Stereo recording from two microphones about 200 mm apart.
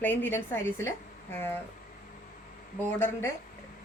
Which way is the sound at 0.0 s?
10° left (ahead or behind).